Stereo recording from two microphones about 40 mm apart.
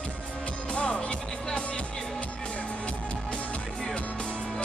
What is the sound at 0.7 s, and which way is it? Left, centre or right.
Music, left.